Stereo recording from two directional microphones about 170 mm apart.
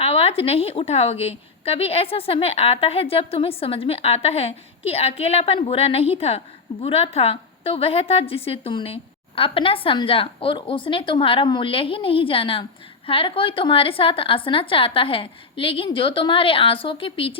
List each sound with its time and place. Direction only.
0.0 s a woman's voice: 35° left (ahead or behind)